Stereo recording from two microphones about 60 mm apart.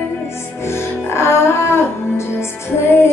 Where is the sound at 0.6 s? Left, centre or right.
Left.